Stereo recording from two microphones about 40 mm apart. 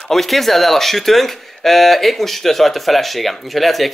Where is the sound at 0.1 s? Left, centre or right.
Centre.